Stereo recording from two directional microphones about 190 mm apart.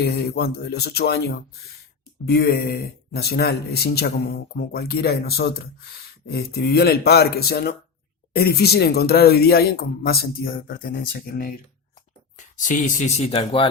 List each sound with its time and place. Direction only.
0.0 s speech: 55° left (ahead or behind); by 13.7 s 30° left (ahead or behind)